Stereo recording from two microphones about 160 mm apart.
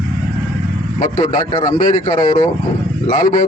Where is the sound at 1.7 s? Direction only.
55° left (ahead or behind).